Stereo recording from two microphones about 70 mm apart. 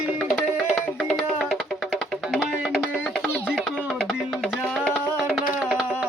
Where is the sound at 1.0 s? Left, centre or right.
Centre.